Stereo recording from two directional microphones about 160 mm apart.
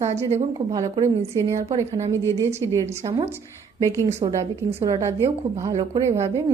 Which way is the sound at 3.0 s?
30° right (ahead or behind).